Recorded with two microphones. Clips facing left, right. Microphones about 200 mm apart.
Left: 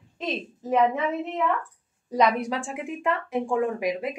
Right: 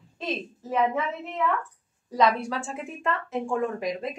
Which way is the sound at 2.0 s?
20° left (ahead or behind).